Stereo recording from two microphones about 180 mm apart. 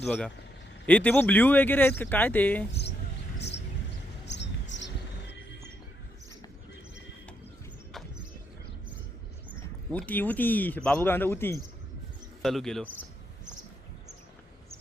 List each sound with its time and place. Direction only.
0.0 s speech: 5° left (ahead or behind)
4.3 s a sound: 80° left
9.9 s speech: 10° left (ahead or behind)
12.4 s speech: centre (ahead or behind)